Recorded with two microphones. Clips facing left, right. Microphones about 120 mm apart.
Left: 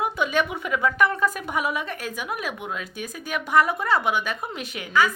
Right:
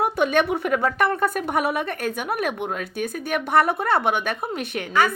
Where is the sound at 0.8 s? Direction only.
40° right (ahead or behind).